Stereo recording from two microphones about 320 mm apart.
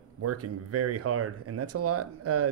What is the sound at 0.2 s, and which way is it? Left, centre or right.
Speech, right.